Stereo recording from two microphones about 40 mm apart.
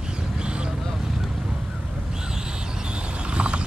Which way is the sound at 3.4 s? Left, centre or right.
Right.